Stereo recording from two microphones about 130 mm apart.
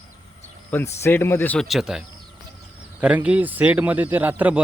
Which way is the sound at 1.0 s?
20° left (ahead or behind).